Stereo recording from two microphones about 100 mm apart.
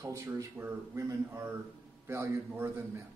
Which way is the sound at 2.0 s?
25° right (ahead or behind).